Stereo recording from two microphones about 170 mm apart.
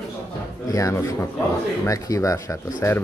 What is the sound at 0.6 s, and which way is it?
Speech, 20° left (ahead or behind).